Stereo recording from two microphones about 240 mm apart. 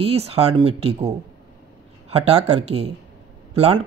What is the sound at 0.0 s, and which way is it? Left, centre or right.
Speech, right.